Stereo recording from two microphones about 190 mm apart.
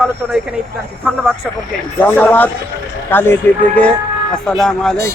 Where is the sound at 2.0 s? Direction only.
10° left (ahead or behind).